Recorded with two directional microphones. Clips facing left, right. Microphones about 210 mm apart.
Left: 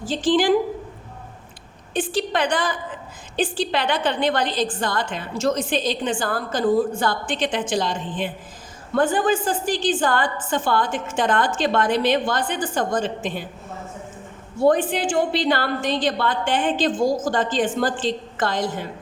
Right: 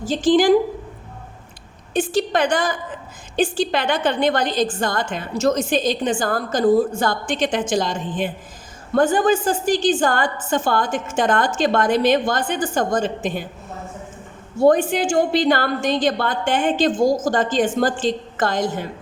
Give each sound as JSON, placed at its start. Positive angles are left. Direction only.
{"t": 0.0, "sound": "a woman's voice", "side_deg": -45}
{"t": 1.9, "sound": "a woman's voice", "side_deg": -45}
{"t": 14.7, "sound": "a woman's voice", "side_deg": -45}